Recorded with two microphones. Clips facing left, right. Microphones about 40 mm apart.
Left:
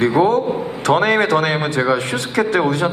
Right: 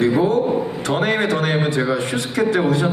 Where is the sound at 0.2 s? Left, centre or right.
Left.